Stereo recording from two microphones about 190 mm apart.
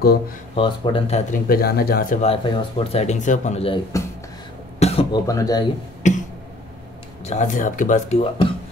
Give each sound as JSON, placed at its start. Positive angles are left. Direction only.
{"t": 0.6, "sound": "speech", "side_deg": 25}
{"t": 1.5, "sound": "speech", "side_deg": 55}
{"t": 2.2, "sound": "speech", "side_deg": 25}
{"t": 4.7, "sound": "cough", "side_deg": 30}
{"t": 5.2, "sound": "speech", "side_deg": 20}
{"t": 6.0, "sound": "speech", "side_deg": 40}
{"t": 7.2, "sound": "speech", "side_deg": 40}